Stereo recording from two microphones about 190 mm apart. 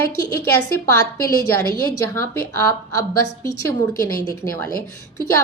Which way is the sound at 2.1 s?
15° left (ahead or behind).